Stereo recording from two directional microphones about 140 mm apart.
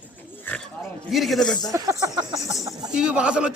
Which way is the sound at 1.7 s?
25° right (ahead or behind).